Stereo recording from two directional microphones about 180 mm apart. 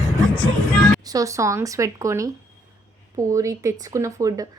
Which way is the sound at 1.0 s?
20° right (ahead or behind).